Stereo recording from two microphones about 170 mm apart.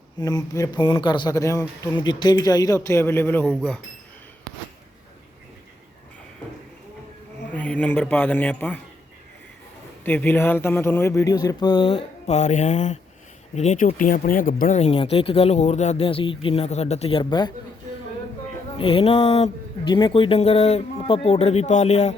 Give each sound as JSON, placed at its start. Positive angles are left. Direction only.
{"t": 0.2, "sound": "a man's voice", "side_deg": 20}
{"t": 7.5, "sound": "speech", "side_deg": 10}
{"t": 10.0, "sound": "a man's voice", "side_deg": 10}
{"t": 14.8, "sound": "speech", "side_deg": 35}
{"t": 18.8, "sound": "speech", "side_deg": 35}